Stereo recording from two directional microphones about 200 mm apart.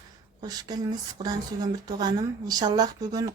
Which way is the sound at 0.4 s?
20° right (ahead or behind).